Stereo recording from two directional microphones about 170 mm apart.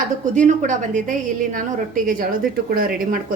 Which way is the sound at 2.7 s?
60° right (ahead or behind).